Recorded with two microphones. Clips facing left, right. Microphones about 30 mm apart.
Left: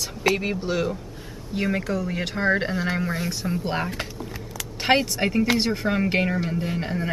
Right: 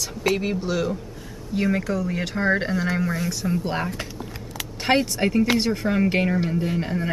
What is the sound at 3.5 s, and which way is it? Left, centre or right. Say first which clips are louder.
Speech: right 1 dB; centre.